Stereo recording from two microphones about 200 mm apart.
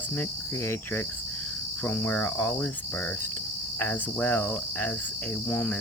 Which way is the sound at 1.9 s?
10° left (ahead or behind).